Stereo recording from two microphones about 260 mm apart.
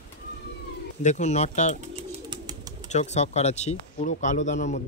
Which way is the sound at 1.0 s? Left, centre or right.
Left.